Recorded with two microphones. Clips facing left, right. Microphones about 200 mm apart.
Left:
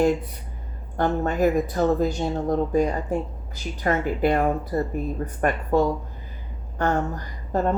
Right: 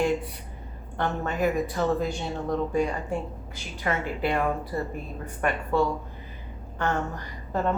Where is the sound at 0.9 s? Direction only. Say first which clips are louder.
Left 5 dB; 40° left (ahead or behind).